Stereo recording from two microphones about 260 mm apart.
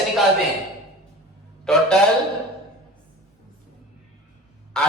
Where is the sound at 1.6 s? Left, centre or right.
Centre.